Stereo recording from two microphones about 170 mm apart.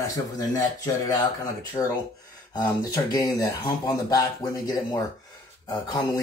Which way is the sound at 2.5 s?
25° left (ahead or behind).